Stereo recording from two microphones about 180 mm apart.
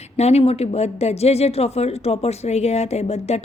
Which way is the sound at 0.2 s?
35° left (ahead or behind).